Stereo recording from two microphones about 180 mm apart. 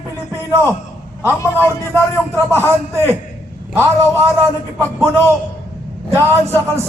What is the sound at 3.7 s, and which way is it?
A man's voice, 15° right (ahead or behind).